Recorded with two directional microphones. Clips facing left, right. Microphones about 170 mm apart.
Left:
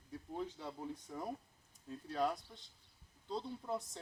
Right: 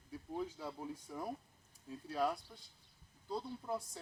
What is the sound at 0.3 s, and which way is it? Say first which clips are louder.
Speech: right 1 dB; 5° right (ahead or behind).